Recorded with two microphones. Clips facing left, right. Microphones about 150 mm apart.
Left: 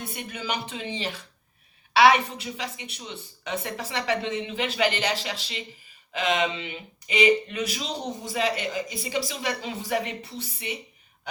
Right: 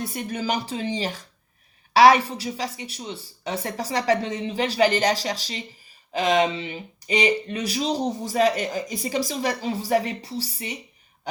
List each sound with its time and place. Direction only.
0.0 s speech: 40° right (ahead or behind)